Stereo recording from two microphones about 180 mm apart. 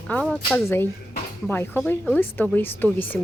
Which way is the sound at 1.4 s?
10° left (ahead or behind).